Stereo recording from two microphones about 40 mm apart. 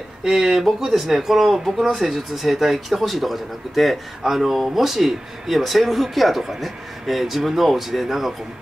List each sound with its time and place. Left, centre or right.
0.2 s speech: centre